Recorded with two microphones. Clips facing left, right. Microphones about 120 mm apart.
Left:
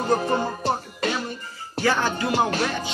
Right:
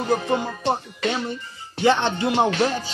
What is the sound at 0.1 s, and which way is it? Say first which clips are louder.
Speech: even; 40° left (ahead or behind).